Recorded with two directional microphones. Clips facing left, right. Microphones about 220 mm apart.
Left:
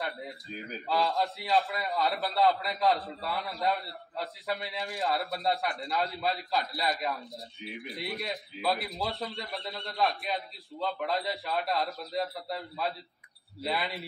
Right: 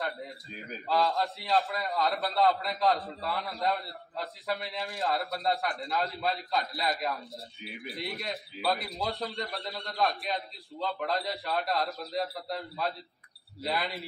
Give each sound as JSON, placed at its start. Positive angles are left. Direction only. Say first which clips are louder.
{"t": 0.0, "sound": "a man's voice", "louder": "right 1 dB", "side_deg": 0}